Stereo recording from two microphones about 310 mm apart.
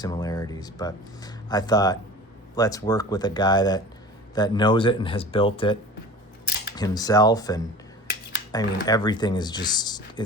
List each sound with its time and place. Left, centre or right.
0.0 s speech: centre
6.7 s speech: centre